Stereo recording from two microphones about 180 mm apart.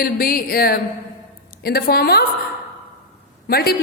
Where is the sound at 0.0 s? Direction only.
55° left (ahead or behind).